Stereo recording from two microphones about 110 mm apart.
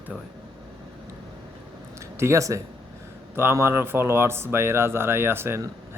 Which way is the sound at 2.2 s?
25° right (ahead or behind).